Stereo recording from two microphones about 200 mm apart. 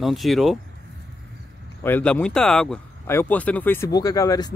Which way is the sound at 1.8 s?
10° left (ahead or behind).